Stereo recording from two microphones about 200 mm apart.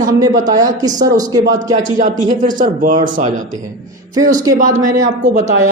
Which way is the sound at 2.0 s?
40° right (ahead or behind).